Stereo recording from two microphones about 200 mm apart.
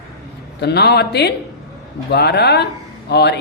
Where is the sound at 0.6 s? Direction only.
55° left (ahead or behind).